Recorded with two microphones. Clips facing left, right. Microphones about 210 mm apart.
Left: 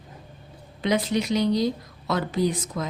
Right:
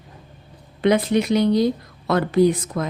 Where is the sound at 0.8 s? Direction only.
55° right (ahead or behind).